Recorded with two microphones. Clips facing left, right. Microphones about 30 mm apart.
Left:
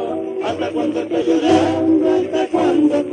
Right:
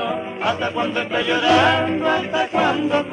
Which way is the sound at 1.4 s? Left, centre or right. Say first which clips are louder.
Even; right.